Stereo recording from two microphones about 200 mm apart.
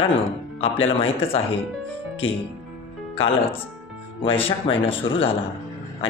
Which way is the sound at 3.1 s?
30° left (ahead or behind).